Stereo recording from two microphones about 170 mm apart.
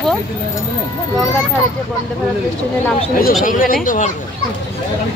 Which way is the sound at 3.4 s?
55° left (ahead or behind).